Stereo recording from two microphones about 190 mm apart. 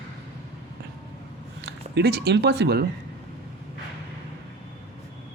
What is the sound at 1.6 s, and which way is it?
Speech, 60° right (ahead or behind).